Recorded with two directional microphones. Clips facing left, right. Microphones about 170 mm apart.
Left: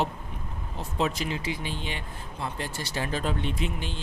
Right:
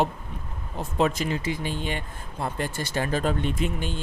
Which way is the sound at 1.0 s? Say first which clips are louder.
Right 4 dB; 50° right (ahead or behind).